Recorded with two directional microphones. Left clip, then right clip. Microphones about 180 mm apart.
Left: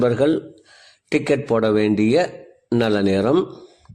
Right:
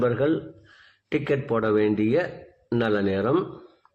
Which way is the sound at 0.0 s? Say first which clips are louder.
Left 5 dB; 40° left (ahead or behind).